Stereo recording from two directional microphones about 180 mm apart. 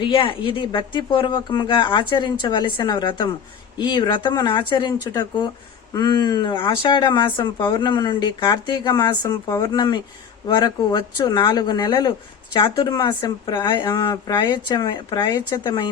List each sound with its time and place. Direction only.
0.0 s speech: 30° left (ahead or behind)